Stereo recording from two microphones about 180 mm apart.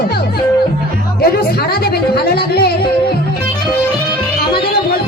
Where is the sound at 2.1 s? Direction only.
60° left (ahead or behind).